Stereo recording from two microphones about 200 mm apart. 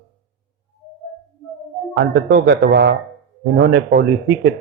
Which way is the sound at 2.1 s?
55° right (ahead or behind).